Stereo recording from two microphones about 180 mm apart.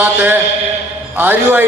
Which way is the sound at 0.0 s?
10° right (ahead or behind).